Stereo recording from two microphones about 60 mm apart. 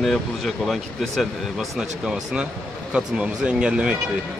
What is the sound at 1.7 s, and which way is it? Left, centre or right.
Speech, centre.